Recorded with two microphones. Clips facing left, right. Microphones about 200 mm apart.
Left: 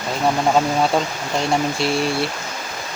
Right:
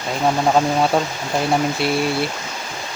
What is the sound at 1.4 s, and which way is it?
Speech, centre (ahead or behind).